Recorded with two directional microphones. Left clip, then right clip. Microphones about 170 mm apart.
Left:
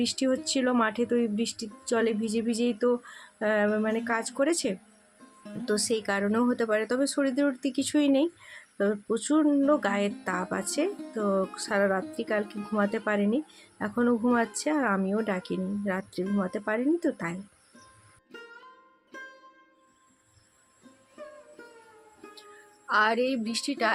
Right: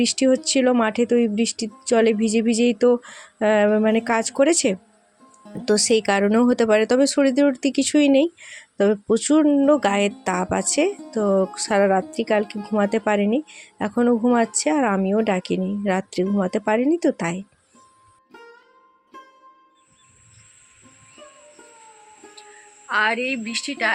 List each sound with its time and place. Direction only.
0.0 s speech: 35° right (ahead or behind)
18.3 s music: centre (ahead or behind)
22.9 s a woman's voice: 5° left (ahead or behind)